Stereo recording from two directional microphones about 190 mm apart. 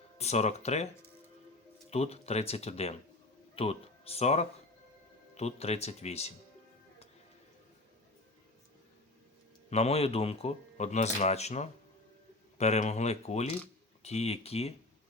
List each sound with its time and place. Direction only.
0.2 s a man's voice: 35° left (ahead or behind)
1.9 s a man's voice: 35° left (ahead or behind)
9.6 s a man's voice: 35° left (ahead or behind)